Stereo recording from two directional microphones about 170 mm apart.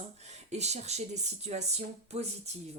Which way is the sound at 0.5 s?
40° right (ahead or behind).